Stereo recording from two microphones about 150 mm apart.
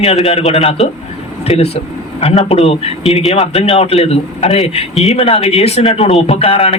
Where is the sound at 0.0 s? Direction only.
40° left (ahead or behind).